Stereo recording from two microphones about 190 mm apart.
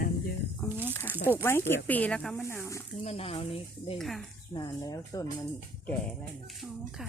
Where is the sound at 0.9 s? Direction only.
10° left (ahead or behind).